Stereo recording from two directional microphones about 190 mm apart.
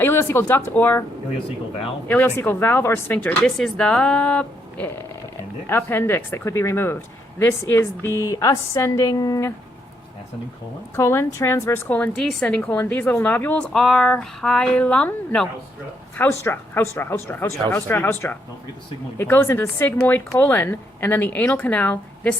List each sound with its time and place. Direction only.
0.0 s speech: 10° left (ahead or behind)
2.0 s a woman's voice: 10° left (ahead or behind)
10.9 s a woman's voice: 15° left (ahead or behind)